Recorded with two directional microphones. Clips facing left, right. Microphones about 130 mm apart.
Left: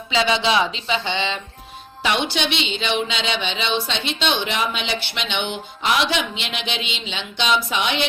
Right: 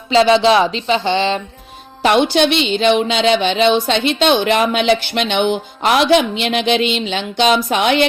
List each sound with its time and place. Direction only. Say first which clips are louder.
0.1 s speech: right 9 dB; 35° right (ahead or behind)
2.0 s music: right 9 dB; 45° right (ahead or behind)